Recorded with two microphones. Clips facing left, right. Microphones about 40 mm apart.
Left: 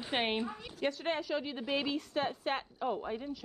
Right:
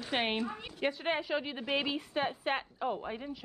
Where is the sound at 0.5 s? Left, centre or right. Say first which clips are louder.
Right 1 dB; right.